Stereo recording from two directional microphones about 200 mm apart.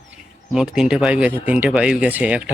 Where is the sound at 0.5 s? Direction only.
5° right (ahead or behind).